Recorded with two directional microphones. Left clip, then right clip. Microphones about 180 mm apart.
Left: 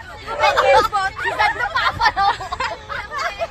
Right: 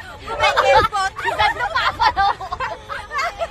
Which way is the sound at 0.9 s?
50° right (ahead or behind).